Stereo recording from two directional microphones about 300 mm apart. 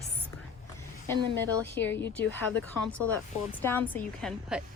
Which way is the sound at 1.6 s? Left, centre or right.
Centre.